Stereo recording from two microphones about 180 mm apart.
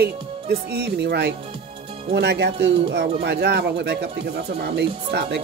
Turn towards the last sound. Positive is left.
turn(degrees=-65)  # may be behind; listen again after turning